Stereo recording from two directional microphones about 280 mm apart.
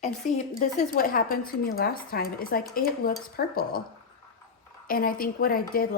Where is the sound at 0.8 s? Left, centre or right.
Left.